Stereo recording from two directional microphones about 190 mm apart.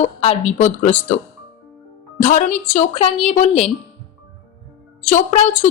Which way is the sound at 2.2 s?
40° left (ahead or behind).